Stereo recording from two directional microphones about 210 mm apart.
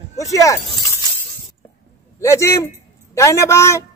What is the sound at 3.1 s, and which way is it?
Speech, 15° left (ahead or behind).